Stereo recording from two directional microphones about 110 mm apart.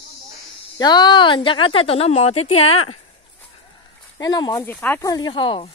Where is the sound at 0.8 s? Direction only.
40° left (ahead or behind); by 2.9 s 70° left (ahead or behind).